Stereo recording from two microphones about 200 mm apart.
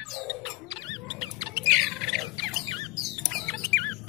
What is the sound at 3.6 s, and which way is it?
Rodents, 10° left (ahead or behind).